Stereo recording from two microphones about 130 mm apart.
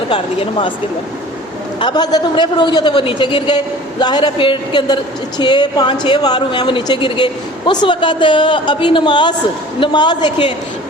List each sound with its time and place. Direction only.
0.1 s a woman's voice: 40° left (ahead or behind)
1.8 s a woman's voice: 35° left (ahead or behind)